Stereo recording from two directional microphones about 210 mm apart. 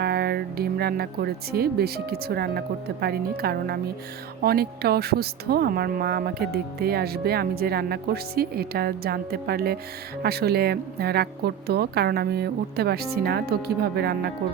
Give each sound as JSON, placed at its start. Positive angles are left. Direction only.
{"t": 0.0, "sound": "speech", "side_deg": -50}